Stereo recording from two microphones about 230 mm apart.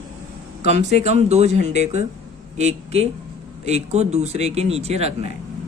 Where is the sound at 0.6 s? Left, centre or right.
Right.